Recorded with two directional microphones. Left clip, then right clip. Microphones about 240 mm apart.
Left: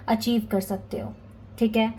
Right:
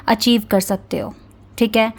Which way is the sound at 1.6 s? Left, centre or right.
Right.